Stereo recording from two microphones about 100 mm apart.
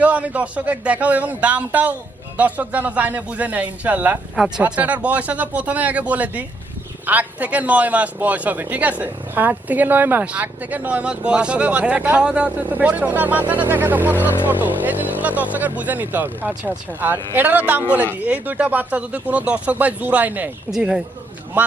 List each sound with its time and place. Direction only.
0.0 s a man's voice: 15° right (ahead or behind)
13.5 s music: 20° right (ahead or behind)
14.3 s a man's voice: 20° right (ahead or behind)
20.7 s speech: 5° right (ahead or behind)